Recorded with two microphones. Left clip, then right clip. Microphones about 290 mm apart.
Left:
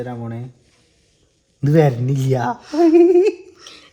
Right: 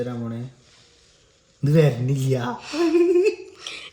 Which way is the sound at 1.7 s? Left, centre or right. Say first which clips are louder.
Left 4 dB; centre.